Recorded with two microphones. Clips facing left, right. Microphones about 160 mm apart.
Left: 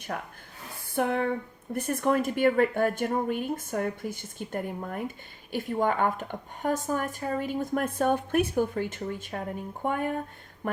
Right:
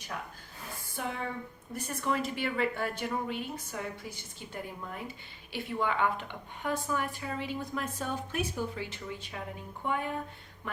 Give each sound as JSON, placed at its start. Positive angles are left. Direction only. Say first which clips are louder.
{"t": 0.1, "sound": "speech", "louder": "left 3 dB", "side_deg": 55}